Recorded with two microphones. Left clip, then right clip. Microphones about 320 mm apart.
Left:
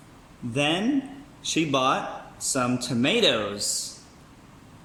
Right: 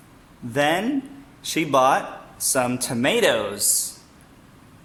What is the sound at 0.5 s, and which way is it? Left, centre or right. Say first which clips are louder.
A man's voice: right 4 dB; right.